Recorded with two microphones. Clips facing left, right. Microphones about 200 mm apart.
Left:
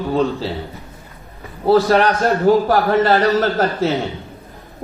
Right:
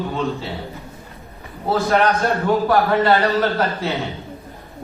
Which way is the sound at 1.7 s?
35° left (ahead or behind).